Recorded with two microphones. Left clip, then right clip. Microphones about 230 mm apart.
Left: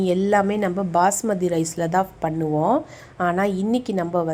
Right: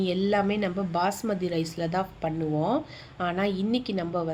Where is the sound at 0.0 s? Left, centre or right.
Centre.